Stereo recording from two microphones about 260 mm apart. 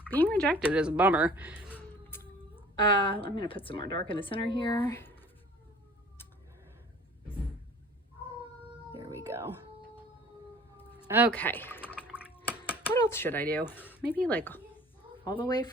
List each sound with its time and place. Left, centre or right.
0.1 s speech: centre
1.7 s a sound: centre
2.8 s a woman's voice: centre
4.8 s speech: centre
9.0 s whispering: centre
11.3 s speech: centre
11.9 s drip: centre
12.3 s speech: centre
14.8 s a sound: centre